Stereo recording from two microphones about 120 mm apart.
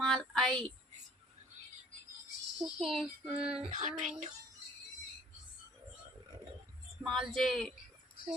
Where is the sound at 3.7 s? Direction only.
80° right.